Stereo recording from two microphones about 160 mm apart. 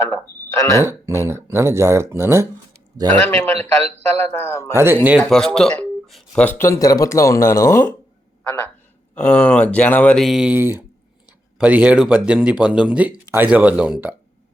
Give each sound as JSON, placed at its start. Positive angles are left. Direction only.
{"t": 0.0, "sound": "speech", "side_deg": 20}
{"t": 0.9, "sound": "speech", "side_deg": -15}
{"t": 3.5, "sound": "a man's voice", "side_deg": -40}
{"t": 4.3, "sound": "speech", "side_deg": 15}
{"t": 4.7, "sound": "speech", "side_deg": -15}
{"t": 5.2, "sound": "a man's voice", "side_deg": 5}